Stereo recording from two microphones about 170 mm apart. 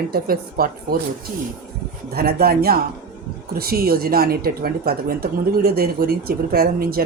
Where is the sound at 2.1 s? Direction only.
65° right (ahead or behind).